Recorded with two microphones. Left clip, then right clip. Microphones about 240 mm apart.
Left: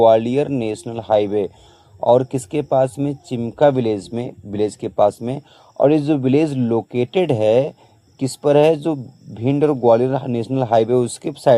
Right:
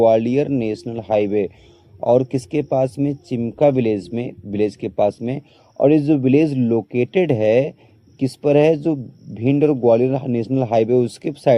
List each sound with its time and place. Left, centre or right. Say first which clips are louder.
0.0 s speech: left 2 dB; centre